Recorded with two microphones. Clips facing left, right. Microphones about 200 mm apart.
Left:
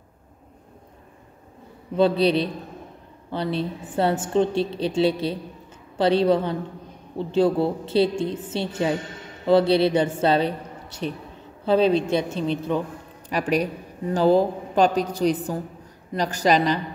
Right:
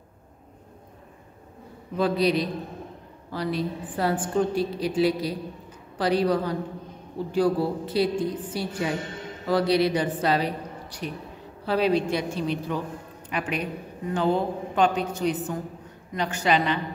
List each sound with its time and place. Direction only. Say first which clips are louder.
2.0 s a woman's voice: left 4 dB; 30° left (ahead or behind)
13.3 s a man's voice: left 6 dB; 40° left (ahead or behind)